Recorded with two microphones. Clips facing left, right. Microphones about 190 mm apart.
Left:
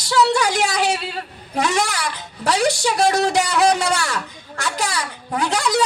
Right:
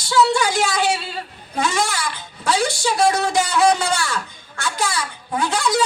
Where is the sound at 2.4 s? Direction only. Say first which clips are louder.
Left 2 dB; 40° left (ahead or behind).